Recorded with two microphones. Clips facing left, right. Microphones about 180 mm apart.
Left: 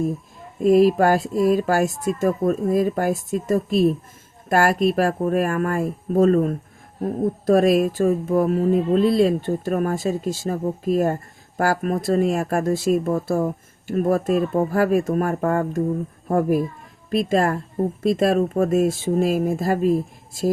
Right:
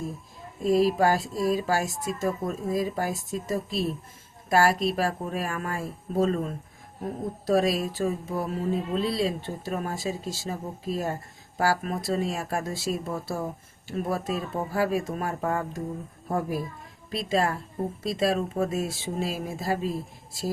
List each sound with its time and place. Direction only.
0.6 s speech: 55° left (ahead or behind)